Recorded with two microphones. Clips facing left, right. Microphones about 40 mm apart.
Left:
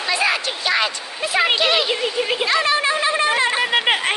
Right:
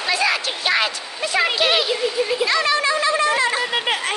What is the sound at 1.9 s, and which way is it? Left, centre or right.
Speech, left.